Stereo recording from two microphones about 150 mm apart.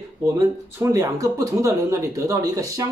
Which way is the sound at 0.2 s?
20° right (ahead or behind).